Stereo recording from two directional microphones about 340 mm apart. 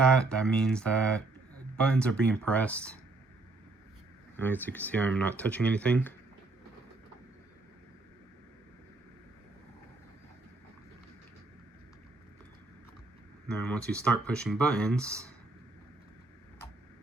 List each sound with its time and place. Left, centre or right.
0.0 s speech: centre
4.4 s speech: centre
13.5 s speech: centre